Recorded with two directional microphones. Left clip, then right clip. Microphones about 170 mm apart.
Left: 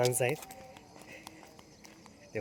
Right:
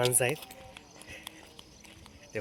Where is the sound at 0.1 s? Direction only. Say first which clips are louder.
Right 2 dB; 10° right (ahead or behind).